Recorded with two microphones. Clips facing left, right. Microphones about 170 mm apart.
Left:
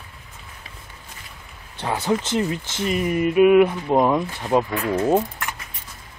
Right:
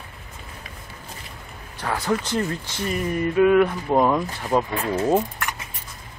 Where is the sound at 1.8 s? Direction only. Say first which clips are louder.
Left 2 dB; 25° left (ahead or behind).